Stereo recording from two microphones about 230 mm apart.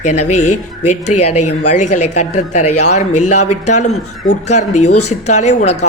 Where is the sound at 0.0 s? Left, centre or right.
Left.